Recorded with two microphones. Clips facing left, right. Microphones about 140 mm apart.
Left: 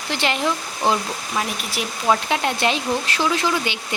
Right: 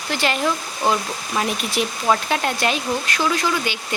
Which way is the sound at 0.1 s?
20° left (ahead or behind).